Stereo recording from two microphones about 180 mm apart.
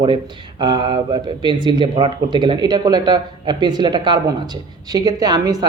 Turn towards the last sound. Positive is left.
turn(degrees=-20)  # may be behind; listen again after turning